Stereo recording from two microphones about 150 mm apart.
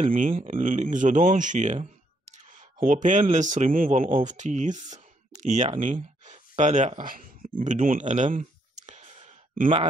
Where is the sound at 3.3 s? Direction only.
55° right (ahead or behind).